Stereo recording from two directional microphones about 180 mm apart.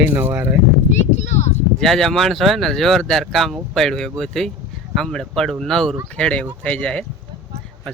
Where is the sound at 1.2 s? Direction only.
40° left (ahead or behind).